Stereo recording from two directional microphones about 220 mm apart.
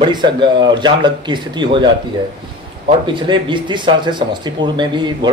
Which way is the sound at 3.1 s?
20° right (ahead or behind).